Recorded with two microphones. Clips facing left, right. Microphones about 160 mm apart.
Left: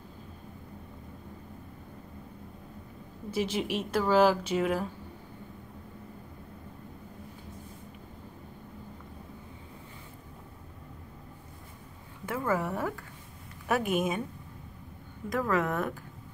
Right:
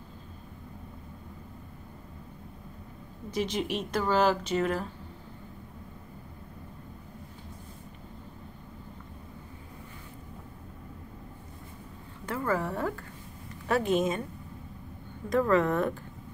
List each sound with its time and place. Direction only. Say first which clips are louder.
3.3 s speech: even; 5° left (ahead or behind)
12.3 s a woman's voice: even; 10° left (ahead or behind)
15.2 s speech: right 4 dB; centre (ahead or behind)